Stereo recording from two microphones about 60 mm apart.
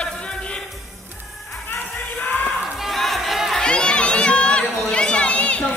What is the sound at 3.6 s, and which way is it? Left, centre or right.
Run, centre.